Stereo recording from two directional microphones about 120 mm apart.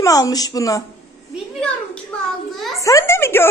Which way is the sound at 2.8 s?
25° left (ahead or behind).